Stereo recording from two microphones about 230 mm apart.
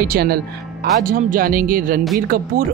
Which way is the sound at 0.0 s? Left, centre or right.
Right.